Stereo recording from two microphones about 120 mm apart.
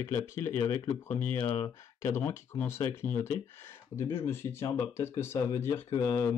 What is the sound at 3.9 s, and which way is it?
Speech, 20° left (ahead or behind).